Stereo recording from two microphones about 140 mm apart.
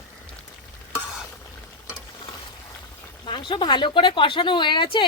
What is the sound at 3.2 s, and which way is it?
Speech, 35° left (ahead or behind).